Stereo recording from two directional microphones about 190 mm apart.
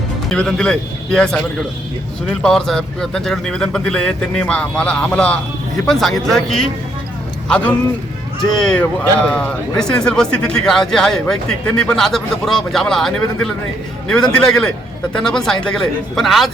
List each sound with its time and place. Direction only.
0.3 s speech: 5° left (ahead or behind)
2.4 s speech: centre (ahead or behind)